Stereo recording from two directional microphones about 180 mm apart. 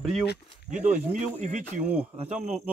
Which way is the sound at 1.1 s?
45° right (ahead or behind).